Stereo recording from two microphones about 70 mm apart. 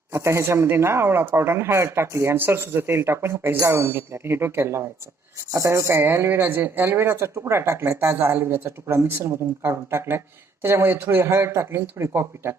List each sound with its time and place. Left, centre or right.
0.1 s speech: right